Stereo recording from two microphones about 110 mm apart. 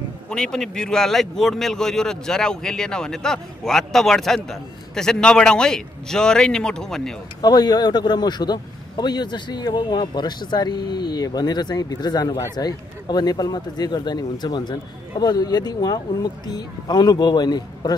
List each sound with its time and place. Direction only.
0.3 s a man's voice: 5° left (ahead or behind)
7.4 s speech: 40° left (ahead or behind)